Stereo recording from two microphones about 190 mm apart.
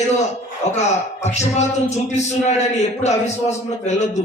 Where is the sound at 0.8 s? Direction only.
35° left (ahead or behind).